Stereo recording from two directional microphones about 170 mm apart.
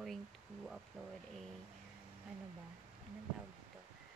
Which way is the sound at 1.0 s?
Centre (ahead or behind).